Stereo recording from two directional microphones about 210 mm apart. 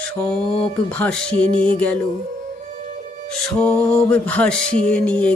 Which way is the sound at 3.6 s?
5° left (ahead or behind).